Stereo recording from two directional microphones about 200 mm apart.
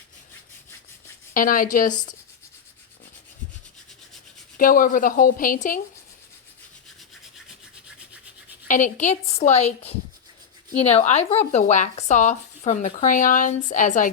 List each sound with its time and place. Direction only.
1.3 s a woman's voice: 45° left (ahead or behind)
4.5 s a woman's voice: 45° left (ahead or behind)
8.6 s speech: 40° left (ahead or behind)